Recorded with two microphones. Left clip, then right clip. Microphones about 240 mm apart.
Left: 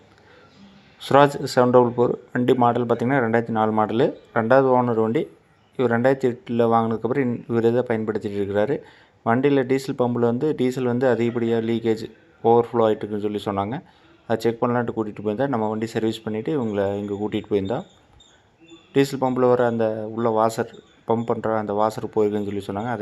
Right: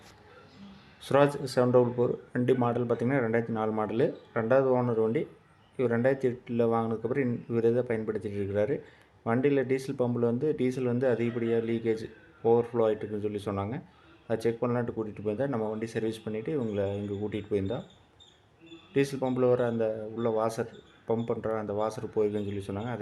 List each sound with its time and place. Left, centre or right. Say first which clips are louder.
1.0 s a man's voice: left 8 dB; centre
18.9 s speech: left 8 dB; centre